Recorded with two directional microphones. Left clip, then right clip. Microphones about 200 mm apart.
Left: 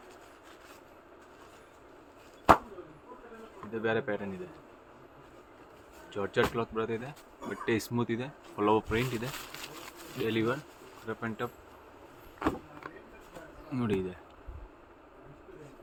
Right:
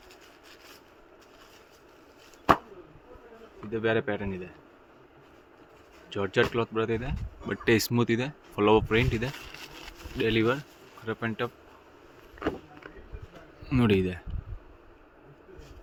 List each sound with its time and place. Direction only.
3.7 s speech: 55° right (ahead or behind)
6.1 s speech: 55° right (ahead or behind)
12.4 s vehicle: 20° left (ahead or behind)
13.7 s speech: 55° right (ahead or behind)